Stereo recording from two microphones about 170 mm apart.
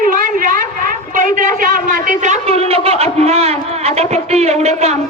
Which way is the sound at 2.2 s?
40° right (ahead or behind).